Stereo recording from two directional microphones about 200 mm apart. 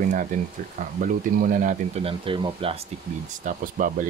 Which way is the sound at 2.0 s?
25° right (ahead or behind).